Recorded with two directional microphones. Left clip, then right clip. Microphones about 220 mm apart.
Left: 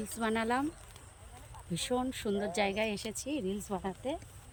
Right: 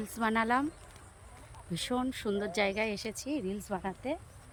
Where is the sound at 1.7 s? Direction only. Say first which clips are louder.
Even; 5° right (ahead or behind).